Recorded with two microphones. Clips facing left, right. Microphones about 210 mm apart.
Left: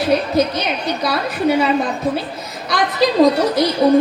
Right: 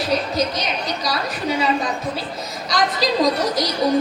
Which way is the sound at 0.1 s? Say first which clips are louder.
Left 6 dB; 55° left (ahead or behind).